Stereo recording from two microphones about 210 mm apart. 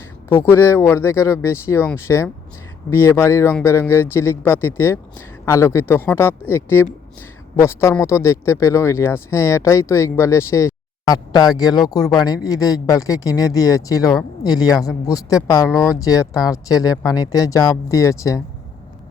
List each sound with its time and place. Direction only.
0.3 s speech: 10° left (ahead or behind)